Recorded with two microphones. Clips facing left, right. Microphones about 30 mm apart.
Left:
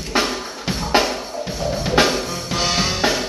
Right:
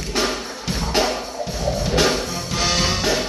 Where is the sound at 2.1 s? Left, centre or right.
Centre.